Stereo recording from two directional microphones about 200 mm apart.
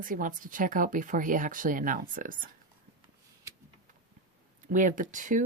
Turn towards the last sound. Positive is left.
turn(degrees=-40)  # may be behind; listen again after turning